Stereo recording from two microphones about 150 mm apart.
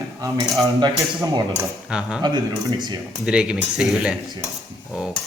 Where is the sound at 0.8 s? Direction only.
30° right (ahead or behind).